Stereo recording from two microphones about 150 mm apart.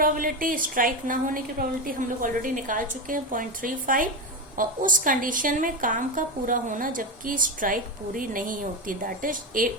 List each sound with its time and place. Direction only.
0.0 s a woman's voice: 70° right (ahead or behind)